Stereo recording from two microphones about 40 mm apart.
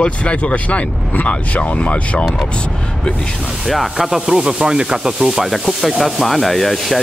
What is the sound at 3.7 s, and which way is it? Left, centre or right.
Sanding, centre.